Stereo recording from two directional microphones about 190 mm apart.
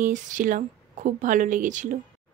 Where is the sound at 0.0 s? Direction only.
45° right (ahead or behind).